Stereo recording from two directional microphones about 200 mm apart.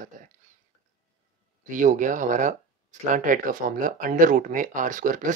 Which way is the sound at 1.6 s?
40° right (ahead or behind).